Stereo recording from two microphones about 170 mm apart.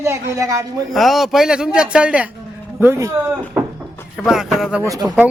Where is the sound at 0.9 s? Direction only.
Centre (ahead or behind).